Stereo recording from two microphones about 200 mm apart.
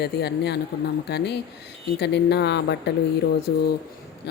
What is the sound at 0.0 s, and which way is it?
Speech, 55° left (ahead or behind).